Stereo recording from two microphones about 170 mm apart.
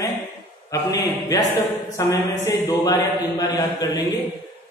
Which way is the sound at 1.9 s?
20° left (ahead or behind).